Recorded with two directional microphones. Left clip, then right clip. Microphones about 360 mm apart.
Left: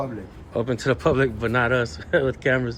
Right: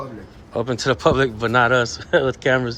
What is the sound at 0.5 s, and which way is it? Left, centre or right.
Speech, centre.